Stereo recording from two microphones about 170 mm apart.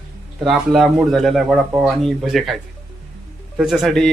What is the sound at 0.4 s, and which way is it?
Speech, centre (ahead or behind).